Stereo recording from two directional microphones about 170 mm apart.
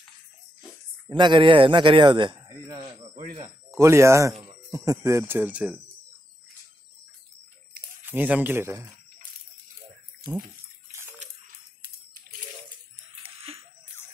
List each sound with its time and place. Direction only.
1.0 s speech: 25° right (ahead or behind); by 5.8 s 5° right (ahead or behind)
8.0 s speech: 10° right (ahead or behind)